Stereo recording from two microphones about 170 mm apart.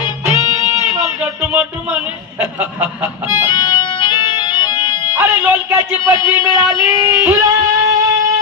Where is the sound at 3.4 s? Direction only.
25° left (ahead or behind).